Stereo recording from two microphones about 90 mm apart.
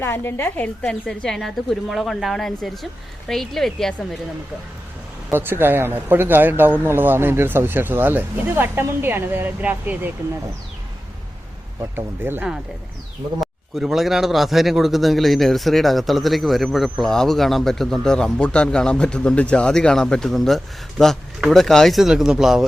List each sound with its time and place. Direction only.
0.0 s a woman's voice: 25° left (ahead or behind)
0.8 s a man's voice: 10° left (ahead or behind)
5.3 s speech: 25° right (ahead or behind)
11.9 s speech: 25° right (ahead or behind)
13.4 s a man's voice: 5° right (ahead or behind)